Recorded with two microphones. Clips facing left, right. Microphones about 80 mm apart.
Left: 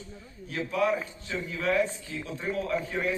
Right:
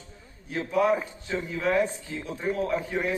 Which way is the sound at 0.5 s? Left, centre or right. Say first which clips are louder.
Right 3 dB; centre.